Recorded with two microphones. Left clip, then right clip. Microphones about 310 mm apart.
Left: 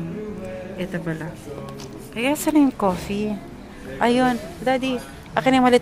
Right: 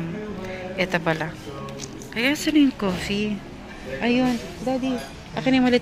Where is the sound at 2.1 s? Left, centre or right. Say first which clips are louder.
Left 1 dB; centre.